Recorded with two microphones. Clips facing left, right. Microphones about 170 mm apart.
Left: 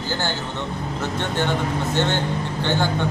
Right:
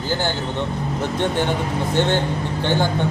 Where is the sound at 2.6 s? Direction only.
15° right (ahead or behind).